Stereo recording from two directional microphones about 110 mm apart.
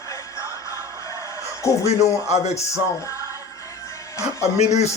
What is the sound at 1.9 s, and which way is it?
Music, 80° left.